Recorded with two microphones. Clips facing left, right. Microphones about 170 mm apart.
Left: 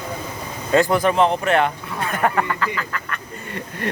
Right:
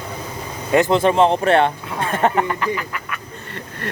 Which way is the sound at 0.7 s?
20° right (ahead or behind).